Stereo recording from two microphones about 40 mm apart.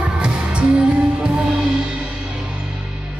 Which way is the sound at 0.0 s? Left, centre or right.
Right.